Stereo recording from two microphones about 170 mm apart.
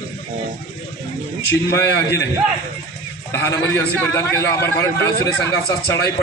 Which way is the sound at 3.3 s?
15° left (ahead or behind).